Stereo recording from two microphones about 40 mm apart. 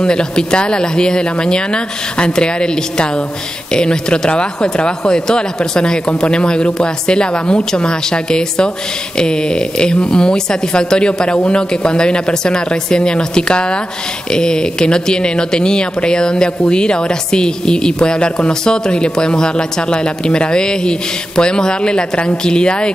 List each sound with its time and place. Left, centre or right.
0.0 s speech: left